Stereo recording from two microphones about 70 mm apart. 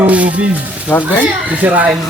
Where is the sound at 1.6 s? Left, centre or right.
Right.